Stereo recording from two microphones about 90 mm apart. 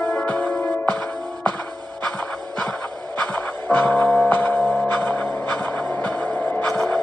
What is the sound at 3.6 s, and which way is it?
Music, 20° left (ahead or behind).